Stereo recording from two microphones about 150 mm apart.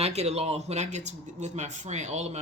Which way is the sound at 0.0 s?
45° right (ahead or behind).